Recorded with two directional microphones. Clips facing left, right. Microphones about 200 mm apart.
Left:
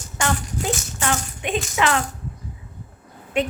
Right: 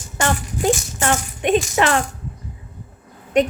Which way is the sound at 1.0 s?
45° right (ahead or behind).